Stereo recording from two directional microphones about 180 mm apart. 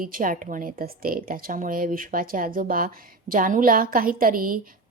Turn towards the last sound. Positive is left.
turn(degrees=-50)  # may be behind; listen again after turning